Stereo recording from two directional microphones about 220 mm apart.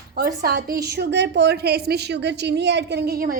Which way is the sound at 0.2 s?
45° right (ahead or behind).